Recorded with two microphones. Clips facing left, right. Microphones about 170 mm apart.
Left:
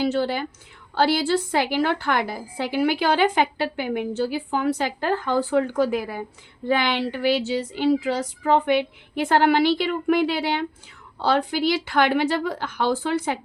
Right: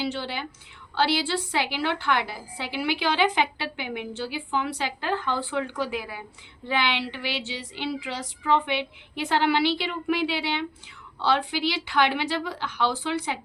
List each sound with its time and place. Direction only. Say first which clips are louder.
0.0 s a woman's voice: left 7 dB; 45° left (ahead or behind)